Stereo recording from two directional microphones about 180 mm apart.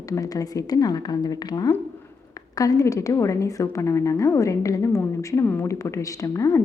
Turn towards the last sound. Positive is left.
turn(degrees=20)  # may be behind; listen again after turning